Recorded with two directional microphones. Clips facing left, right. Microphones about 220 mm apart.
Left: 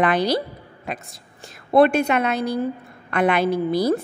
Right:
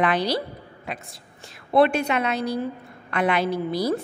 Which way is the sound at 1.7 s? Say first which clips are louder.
Left 3 dB; 50° left (ahead or behind).